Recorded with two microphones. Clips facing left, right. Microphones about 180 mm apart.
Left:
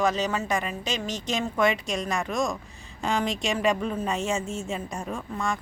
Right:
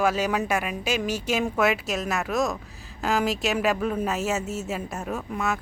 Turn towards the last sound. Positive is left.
turn(degrees=-5)  # may be behind; listen again after turning